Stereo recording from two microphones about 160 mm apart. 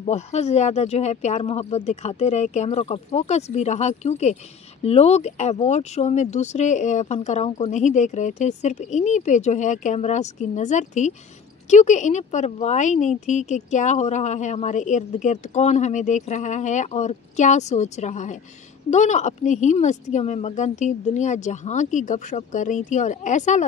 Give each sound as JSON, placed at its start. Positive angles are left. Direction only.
{"t": 0.0, "sound": "a woman's voice", "side_deg": 40}